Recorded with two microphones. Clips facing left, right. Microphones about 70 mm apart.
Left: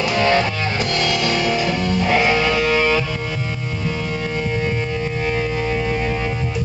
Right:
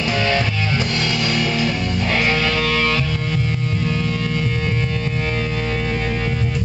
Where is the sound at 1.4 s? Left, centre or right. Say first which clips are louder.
Left 1 dB; centre.